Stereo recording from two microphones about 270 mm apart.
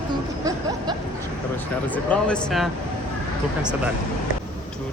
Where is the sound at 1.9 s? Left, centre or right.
Centre.